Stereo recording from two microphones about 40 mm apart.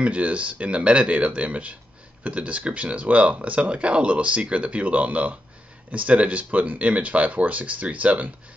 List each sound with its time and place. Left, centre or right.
0.0 s speech: right